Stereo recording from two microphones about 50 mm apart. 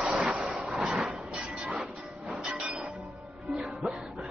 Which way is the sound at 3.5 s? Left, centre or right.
Centre.